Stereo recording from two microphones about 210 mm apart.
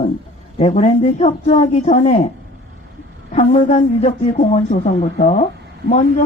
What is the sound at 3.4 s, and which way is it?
Speech, 35° left (ahead or behind).